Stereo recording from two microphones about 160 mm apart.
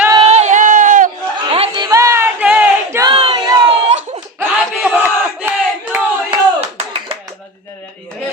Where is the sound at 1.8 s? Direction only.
20° right (ahead or behind).